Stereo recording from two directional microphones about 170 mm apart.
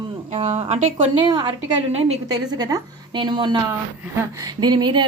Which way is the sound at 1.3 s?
30° right (ahead or behind).